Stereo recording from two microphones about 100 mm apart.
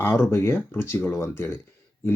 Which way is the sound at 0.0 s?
25° left (ahead or behind).